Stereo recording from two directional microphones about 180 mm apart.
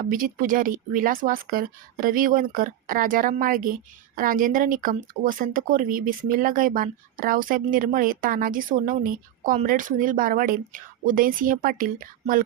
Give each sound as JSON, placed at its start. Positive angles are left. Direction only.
{"t": 0.0, "sound": "speech", "side_deg": -50}